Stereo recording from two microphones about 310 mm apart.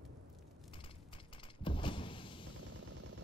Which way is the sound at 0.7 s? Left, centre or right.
Centre.